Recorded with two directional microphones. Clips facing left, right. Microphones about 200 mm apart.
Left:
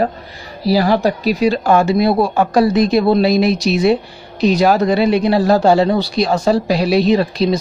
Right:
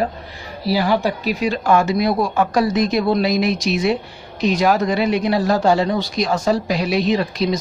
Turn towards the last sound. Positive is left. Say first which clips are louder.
# left 5 dB
turn(degrees=30)  # may be behind; listen again after turning